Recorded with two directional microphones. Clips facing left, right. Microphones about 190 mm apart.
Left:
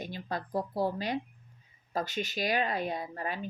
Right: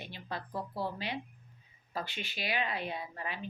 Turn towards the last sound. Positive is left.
turn(degrees=45)  # may be behind; listen again after turning